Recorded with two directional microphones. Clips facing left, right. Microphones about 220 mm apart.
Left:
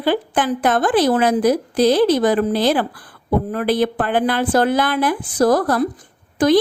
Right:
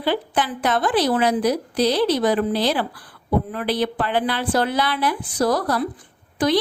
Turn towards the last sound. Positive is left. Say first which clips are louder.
# left 5 dB
turn(degrees=45)  # may be behind; listen again after turning